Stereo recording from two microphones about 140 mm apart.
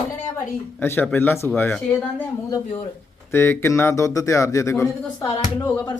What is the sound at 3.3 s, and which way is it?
Speech, 15° left (ahead or behind).